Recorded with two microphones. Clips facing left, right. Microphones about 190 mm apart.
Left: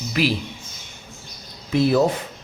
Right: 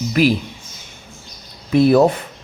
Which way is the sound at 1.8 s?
55° right (ahead or behind).